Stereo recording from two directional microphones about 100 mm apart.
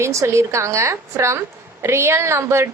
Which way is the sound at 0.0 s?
30° right (ahead or behind).